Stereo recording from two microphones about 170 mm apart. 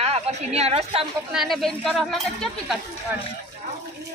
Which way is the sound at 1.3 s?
Centre (ahead or behind).